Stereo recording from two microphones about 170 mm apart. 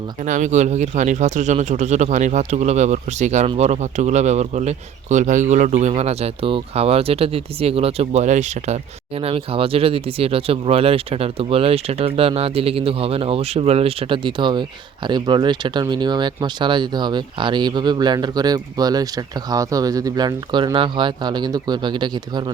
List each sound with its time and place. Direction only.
0.2 s speech: 45° right (ahead or behind); by 22.4 s 25° right (ahead or behind)